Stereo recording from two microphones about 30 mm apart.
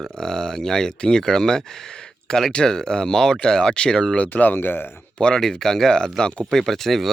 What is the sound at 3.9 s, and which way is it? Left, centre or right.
Speech, centre.